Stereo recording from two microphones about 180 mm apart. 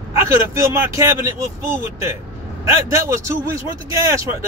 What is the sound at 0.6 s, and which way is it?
Speech, 15° right (ahead or behind).